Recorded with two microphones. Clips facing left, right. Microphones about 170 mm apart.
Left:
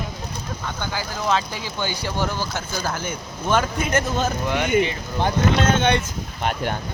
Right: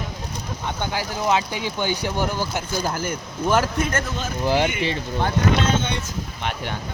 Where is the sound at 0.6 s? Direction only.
20° right (ahead or behind).